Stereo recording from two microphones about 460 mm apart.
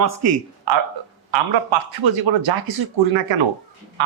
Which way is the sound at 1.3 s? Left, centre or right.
Right.